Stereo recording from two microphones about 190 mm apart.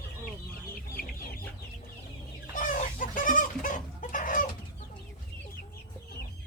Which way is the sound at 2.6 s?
45° left (ahead or behind).